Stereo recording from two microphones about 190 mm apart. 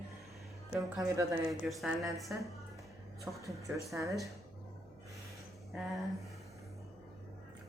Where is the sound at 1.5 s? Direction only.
Centre (ahead or behind); by 4.1 s 15° right (ahead or behind).